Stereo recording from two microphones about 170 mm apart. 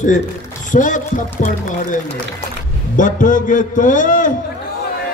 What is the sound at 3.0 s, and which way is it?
A man's voice, 50° left (ahead or behind).